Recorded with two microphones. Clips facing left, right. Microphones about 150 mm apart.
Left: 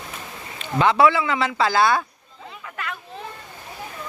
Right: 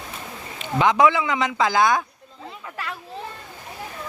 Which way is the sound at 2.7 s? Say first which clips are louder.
Left 1 dB; 30° right (ahead or behind).